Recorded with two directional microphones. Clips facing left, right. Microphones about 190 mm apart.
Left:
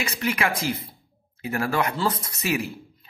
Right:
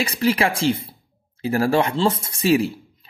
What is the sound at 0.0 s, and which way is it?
Speech, 30° right (ahead or behind).